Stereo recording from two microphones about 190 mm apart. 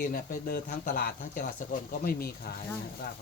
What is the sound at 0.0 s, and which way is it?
Speech, 50° left (ahead or behind).